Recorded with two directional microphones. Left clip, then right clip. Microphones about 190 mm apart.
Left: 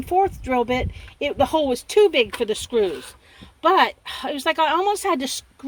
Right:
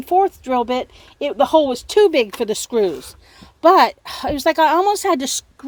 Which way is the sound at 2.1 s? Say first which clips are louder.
Right 2 dB; 25° right (ahead or behind).